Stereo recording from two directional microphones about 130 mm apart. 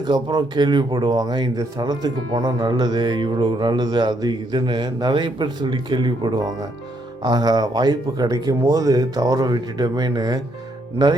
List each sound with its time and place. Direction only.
0.0 s speech: 35° right (ahead or behind)